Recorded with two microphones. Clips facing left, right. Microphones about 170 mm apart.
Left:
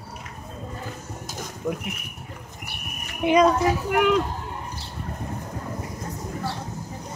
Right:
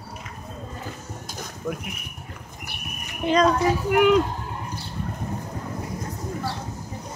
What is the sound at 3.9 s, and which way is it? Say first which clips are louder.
Speech: right 4 dB; 5° right (ahead or behind).